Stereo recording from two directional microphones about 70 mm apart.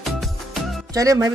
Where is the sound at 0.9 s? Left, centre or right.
Right.